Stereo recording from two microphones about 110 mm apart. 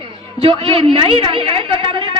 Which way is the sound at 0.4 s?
55° right (ahead or behind).